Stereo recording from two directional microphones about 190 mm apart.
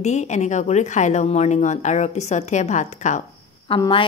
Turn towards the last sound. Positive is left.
turn(degrees=25)  # may be behind; listen again after turning